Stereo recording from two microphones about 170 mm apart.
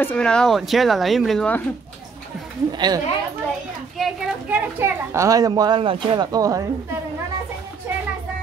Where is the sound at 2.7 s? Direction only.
25° right (ahead or behind).